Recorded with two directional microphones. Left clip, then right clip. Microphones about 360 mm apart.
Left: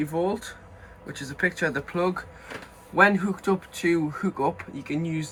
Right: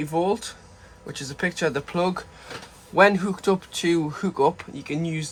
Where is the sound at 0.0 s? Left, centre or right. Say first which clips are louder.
Right 3 dB; centre.